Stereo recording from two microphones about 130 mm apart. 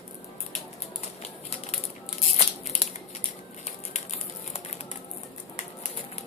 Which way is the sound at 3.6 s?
60° left (ahead or behind).